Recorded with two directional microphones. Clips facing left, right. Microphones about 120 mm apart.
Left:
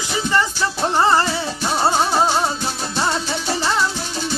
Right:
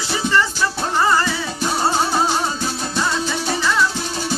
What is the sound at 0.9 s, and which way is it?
Music, 30° left (ahead or behind).